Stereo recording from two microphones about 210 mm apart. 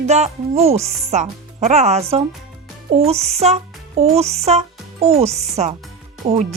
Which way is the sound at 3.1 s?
30° right (ahead or behind).